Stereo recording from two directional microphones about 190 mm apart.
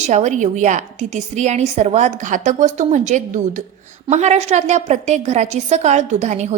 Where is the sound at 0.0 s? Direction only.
40° right (ahead or behind).